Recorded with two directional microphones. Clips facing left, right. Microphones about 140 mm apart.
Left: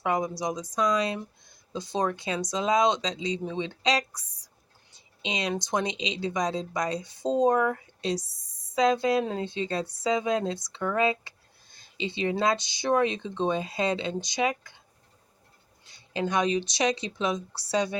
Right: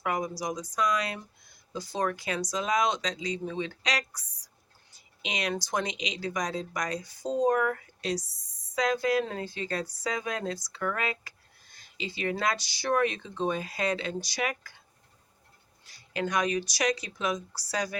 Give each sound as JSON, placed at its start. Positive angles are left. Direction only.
{"t": 0.0, "sound": "a woman's voice", "side_deg": 25}
{"t": 15.8, "sound": "a woman's voice", "side_deg": 25}